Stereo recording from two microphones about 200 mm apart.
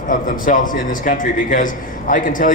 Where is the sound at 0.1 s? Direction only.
40° left (ahead or behind).